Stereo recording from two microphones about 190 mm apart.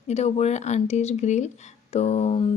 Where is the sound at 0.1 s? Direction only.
35° left (ahead or behind).